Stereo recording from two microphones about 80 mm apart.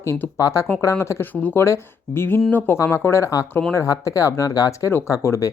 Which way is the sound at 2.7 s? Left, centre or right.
Left.